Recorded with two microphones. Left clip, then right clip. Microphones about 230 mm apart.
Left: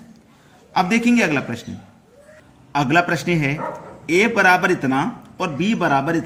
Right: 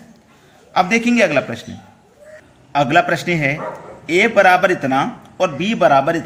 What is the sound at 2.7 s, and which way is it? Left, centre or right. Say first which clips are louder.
A man's voice: right 3 dB; centre.